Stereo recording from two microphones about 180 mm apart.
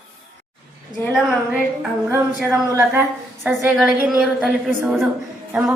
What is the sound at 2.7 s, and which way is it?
A woman's voice, 15° right (ahead or behind).